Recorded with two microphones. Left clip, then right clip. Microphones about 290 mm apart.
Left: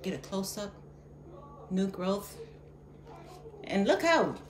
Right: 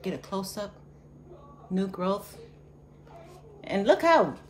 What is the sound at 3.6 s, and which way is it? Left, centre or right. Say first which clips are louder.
Speech: right 5 dB; centre.